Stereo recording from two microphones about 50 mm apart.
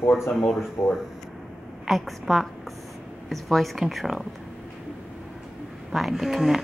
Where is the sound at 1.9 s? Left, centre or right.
Centre.